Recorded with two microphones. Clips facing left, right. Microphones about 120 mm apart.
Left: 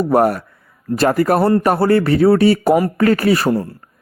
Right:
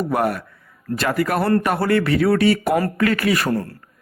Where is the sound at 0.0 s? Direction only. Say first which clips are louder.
Left 6 dB; 40° left (ahead or behind).